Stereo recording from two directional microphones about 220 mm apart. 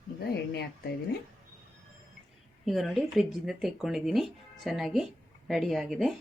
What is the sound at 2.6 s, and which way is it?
Speech, centre (ahead or behind).